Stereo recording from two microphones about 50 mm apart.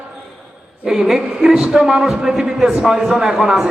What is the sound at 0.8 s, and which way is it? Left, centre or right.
A man's voice, centre.